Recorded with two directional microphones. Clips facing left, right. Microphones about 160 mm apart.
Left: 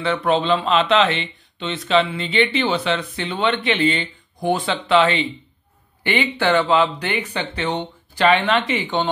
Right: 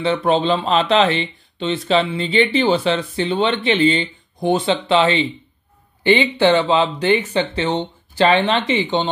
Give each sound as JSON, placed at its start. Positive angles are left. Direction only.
{"t": 0.0, "sound": "speech", "side_deg": -30}